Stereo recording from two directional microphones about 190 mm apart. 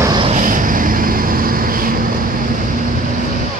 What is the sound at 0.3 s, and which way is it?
Vehicle, 45° right (ahead or behind).